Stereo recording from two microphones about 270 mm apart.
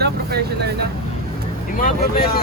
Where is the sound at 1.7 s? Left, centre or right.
Left.